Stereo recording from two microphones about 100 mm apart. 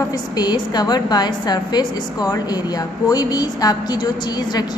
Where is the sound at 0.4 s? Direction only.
45° left (ahead or behind).